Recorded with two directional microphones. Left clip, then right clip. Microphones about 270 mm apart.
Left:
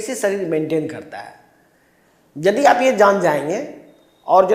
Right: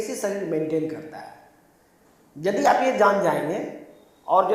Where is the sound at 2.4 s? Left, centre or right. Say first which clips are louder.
Left 6 dB; left.